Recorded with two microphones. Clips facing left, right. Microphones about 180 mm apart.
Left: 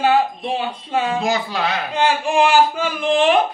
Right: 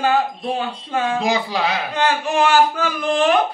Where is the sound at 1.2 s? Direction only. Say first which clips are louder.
Right 1 dB; 15° right (ahead or behind).